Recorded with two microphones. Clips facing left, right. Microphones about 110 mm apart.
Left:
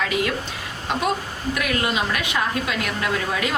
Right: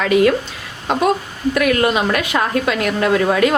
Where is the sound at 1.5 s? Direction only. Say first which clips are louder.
Right 8 dB; 55° right (ahead or behind).